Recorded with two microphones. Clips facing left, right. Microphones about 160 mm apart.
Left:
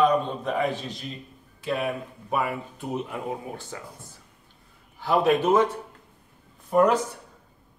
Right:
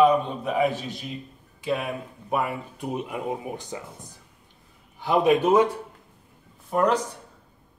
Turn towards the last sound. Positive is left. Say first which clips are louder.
# left 2 dB
turn(degrees=5)  # may be behind; listen again after turning